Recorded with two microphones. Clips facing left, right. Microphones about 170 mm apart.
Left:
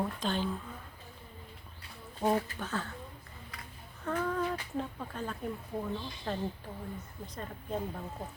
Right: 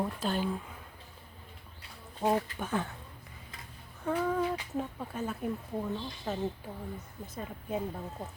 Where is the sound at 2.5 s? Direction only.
15° right (ahead or behind).